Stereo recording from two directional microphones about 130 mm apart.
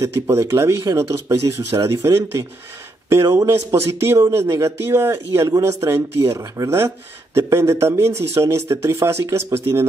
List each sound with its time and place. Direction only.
0.0 s speech: 20° right (ahead or behind)